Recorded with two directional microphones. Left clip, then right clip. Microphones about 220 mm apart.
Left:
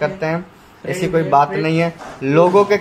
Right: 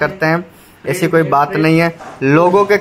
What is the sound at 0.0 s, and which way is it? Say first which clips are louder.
Speech: right 5 dB; 20° right (ahead or behind).